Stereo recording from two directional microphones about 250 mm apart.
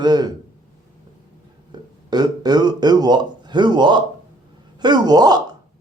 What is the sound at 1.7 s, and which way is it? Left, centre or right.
Burping, centre.